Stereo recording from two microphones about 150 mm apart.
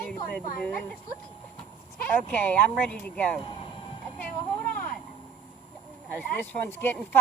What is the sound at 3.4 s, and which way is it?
Vehicle, 40° left (ahead or behind).